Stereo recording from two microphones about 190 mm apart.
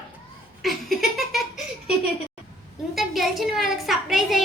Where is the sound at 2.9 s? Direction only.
Centre (ahead or behind).